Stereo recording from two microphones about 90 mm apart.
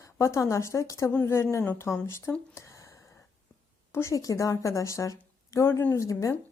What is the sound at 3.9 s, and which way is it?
A woman's voice, 35° left (ahead or behind).